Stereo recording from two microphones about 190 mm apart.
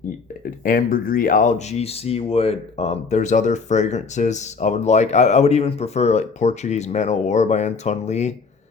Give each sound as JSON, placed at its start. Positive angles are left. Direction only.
{"t": 0.6, "sound": "speech", "side_deg": 50}